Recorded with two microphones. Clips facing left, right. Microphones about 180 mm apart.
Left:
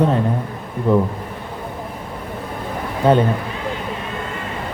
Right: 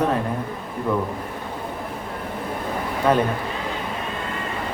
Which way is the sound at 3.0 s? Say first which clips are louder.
Left 5 dB; 30° left (ahead or behind).